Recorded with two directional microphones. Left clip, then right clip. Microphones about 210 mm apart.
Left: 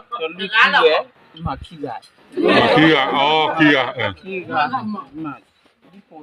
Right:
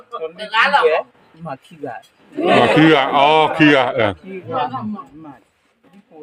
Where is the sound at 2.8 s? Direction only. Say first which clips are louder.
Right 2 dB; 35° right (ahead or behind).